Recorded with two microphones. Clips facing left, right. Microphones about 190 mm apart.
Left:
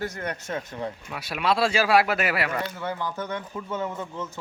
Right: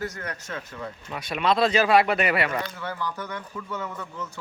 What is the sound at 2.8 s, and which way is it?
Speech, 20° left (ahead or behind).